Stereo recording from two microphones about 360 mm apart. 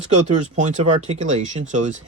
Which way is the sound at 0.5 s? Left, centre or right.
Centre.